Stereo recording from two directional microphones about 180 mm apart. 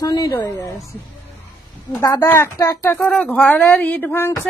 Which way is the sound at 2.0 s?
15° left (ahead or behind).